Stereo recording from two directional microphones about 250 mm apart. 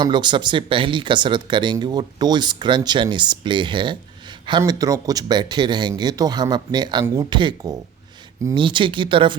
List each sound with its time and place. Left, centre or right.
0.0 s speech: centre